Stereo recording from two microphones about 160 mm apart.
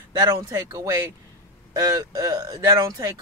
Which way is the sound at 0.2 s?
20° right (ahead or behind).